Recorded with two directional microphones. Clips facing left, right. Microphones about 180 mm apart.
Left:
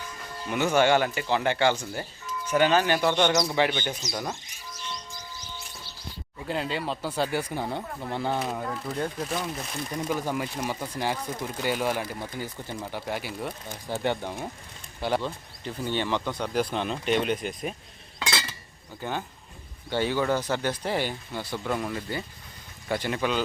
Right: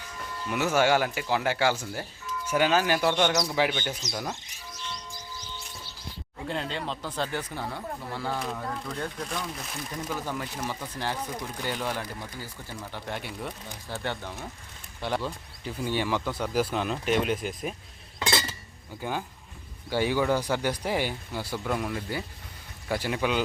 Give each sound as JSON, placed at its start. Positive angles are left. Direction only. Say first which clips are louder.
{"t": 0.5, "sound": "speech", "louder": "left 2 dB", "side_deg": -5}
{"t": 6.5, "sound": "speech", "louder": "left 3 dB", "side_deg": 5}
{"t": 9.1, "sound": "speech", "louder": "left 3 dB", "side_deg": 5}
{"t": 10.1, "sound": "speech", "louder": "left 5 dB", "side_deg": 15}
{"t": 12.9, "sound": "speech", "louder": "left 2 dB", "side_deg": 5}
{"t": 13.8, "sound": "speech", "louder": "left 6 dB", "side_deg": 15}
{"t": 15.0, "sound": "speech", "louder": "left 3 dB", "side_deg": 0}
{"t": 19.0, "sound": "speech", "louder": "even", "side_deg": -10}